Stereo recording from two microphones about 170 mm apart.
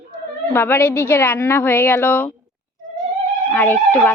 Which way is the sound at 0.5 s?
15° left (ahead or behind).